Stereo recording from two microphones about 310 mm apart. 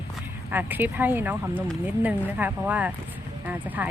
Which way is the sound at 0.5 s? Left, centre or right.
Centre.